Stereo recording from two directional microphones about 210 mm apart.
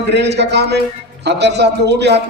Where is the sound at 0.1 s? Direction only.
55° right (ahead or behind).